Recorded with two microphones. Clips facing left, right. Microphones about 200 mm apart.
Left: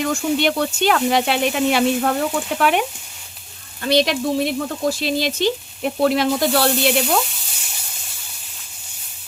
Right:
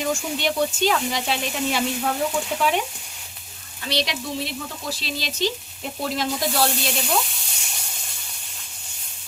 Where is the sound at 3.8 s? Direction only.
50° left (ahead or behind).